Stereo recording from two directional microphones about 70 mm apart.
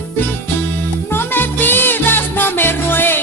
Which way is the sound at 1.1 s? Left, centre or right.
Left.